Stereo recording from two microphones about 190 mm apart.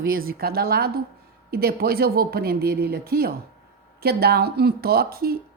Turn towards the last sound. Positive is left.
turn(degrees=-55)  # may be behind; listen again after turning